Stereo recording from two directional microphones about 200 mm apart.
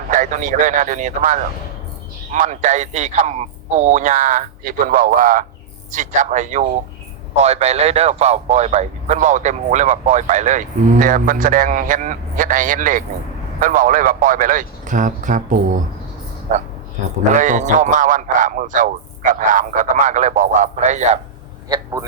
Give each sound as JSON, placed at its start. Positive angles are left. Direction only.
{"t": 0.1, "sound": "a man's voice", "side_deg": -40}
{"t": 21.7, "sound": "speech", "side_deg": -20}